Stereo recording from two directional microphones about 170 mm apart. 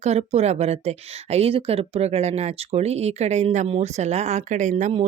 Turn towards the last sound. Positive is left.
turn(degrees=-45)  # may be behind; listen again after turning